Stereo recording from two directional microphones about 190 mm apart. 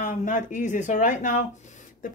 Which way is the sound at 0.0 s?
45° left (ahead or behind).